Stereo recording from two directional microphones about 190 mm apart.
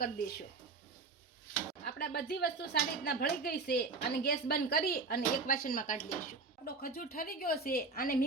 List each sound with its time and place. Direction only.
0.0 s speech: 55° left (ahead or behind)
1.8 s speech: 60° left (ahead or behind)